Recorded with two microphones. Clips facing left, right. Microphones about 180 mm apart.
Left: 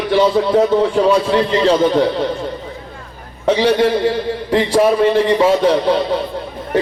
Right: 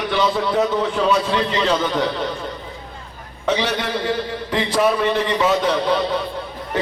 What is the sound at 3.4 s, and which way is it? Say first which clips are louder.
Speech: left 8 dB; 30° left (ahead or behind).